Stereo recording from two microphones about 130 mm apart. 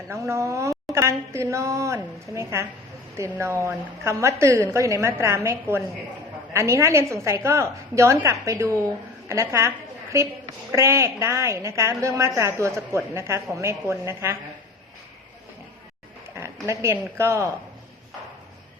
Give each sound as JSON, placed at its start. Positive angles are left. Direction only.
{"t": 0.1, "sound": "a woman's voice", "side_deg": -20}
{"t": 16.6, "sound": "a woman's voice", "side_deg": -20}